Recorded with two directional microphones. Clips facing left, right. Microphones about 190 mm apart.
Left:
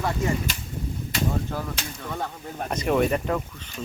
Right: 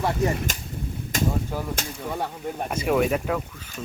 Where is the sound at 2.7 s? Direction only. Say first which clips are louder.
Even; 5° right (ahead or behind).